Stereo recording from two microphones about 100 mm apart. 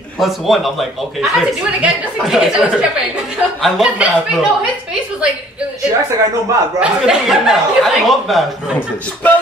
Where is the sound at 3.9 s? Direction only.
10° right (ahead or behind).